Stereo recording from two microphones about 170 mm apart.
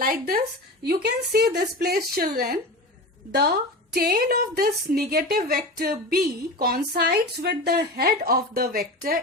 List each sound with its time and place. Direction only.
0.0 s a woman's voice: 60° right (ahead or behind)